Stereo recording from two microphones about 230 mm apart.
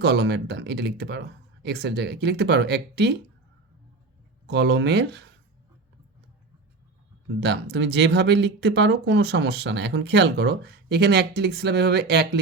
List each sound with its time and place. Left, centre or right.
0.0 s speech: right
4.4 s speech: right
7.4 s speech: right